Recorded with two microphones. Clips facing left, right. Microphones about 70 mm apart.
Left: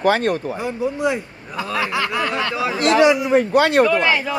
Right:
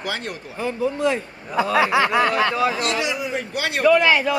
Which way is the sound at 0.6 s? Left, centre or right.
Centre.